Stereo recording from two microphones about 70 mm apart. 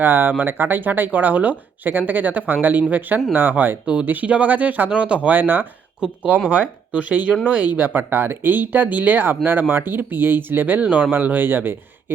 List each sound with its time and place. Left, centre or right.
0.0 s speech: right